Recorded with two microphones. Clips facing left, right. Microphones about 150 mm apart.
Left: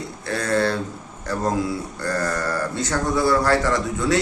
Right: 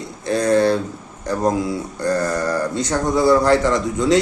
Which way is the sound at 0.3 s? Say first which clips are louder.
Right 6 dB; 15° right (ahead or behind).